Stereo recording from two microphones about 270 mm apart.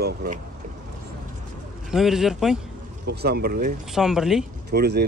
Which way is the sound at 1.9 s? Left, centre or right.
Centre.